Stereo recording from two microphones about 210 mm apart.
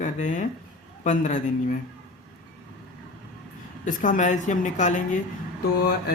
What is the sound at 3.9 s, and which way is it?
Speech, 40° left (ahead or behind).